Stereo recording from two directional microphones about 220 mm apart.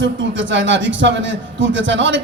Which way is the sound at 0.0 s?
55° right (ahead or behind).